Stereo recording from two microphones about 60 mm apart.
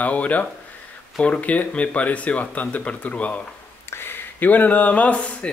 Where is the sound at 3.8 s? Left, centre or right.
Left.